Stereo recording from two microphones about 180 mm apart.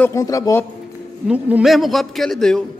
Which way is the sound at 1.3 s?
5° right (ahead or behind).